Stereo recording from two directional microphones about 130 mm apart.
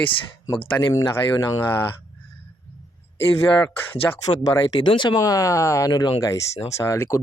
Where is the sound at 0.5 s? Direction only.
40° left (ahead or behind).